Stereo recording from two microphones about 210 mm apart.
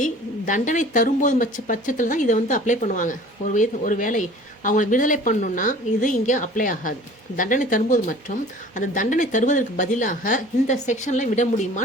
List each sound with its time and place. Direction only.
0.0 s speech: 40° left (ahead or behind)